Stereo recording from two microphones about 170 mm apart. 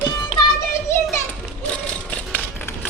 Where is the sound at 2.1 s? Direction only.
10° left (ahead or behind).